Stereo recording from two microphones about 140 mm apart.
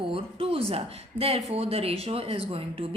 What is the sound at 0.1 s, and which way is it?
A woman's voice, 40° right (ahead or behind).